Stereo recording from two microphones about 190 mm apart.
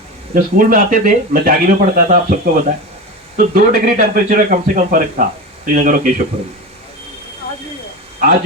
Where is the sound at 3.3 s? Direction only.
50° right (ahead or behind).